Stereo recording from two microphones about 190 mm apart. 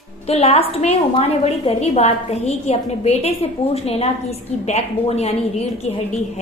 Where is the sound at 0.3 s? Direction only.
35° left (ahead or behind).